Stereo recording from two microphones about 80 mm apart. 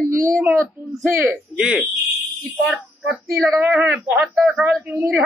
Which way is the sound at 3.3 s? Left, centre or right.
Right.